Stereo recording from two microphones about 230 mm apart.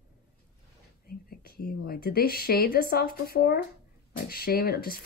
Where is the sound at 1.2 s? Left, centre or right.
Left.